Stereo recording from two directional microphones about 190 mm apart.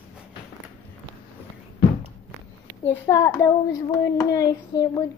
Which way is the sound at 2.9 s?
15° left (ahead or behind).